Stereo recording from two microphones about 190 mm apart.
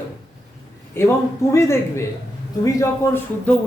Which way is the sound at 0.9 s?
10° left (ahead or behind).